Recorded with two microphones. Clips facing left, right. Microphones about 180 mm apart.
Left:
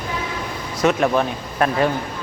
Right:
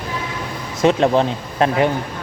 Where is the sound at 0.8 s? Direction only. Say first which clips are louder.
Right 3 dB; 25° right (ahead or behind).